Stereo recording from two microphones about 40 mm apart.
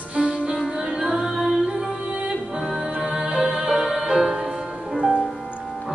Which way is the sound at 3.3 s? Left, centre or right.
Centre.